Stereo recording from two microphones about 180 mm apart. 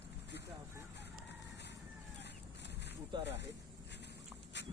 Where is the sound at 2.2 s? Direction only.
70° left (ahead or behind).